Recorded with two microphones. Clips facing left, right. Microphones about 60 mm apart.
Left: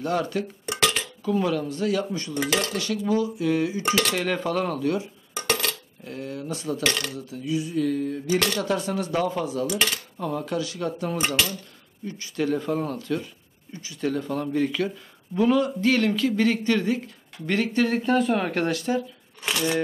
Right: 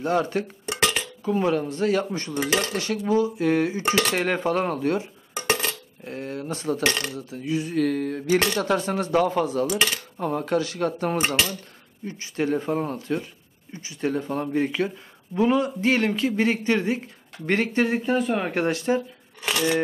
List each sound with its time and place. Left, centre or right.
0.0 s speech: right
0.7 s dishes: right
2.5 s speech: right
5.5 s a sound: right
6.1 s speech: right
7.7 s mantra: right
8.5 s dishes: right
11.1 s speech: right
17.8 s speech: centre
18.7 s speech: right
19.4 s a sound: centre